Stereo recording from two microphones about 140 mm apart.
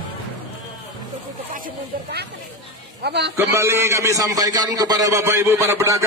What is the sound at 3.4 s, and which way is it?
A man's voice, 20° right (ahead or behind).